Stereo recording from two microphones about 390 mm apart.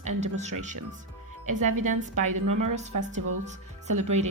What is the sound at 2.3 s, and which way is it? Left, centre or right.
Speech, right.